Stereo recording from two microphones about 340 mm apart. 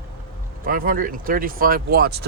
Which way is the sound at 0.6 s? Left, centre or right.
Right.